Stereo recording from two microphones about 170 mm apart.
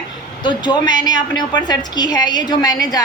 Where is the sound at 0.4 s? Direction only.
25° left (ahead or behind).